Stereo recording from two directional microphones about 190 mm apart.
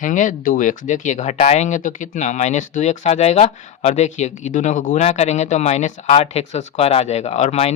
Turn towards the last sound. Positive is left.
turn(degrees=35)  # may be behind; listen again after turning